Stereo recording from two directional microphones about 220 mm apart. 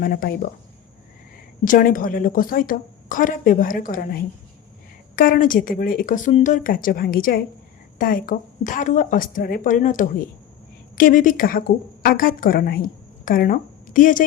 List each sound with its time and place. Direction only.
0.0 s a woman's voice: 40° left (ahead or behind)
1.6 s a woman's voice: 40° left (ahead or behind)